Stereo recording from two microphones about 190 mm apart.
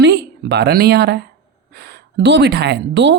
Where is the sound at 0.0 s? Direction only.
65° right (ahead or behind).